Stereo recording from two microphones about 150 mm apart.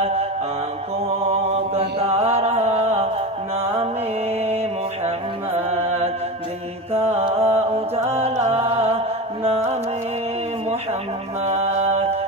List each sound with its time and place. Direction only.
1.2 s mantra: 40° right (ahead or behind)
5.7 s music: 45° right (ahead or behind)
11.4 s music: 45° right (ahead or behind)